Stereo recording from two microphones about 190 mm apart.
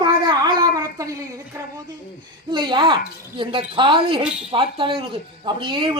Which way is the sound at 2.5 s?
25° right (ahead or behind).